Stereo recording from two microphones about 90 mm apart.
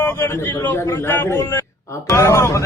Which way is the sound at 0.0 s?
25° left (ahead or behind).